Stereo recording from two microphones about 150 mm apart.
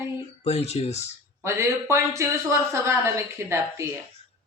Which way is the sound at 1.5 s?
20° right (ahead or behind).